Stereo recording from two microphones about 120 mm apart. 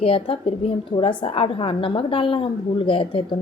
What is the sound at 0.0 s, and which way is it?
A woman's voice, 50° left (ahead or behind).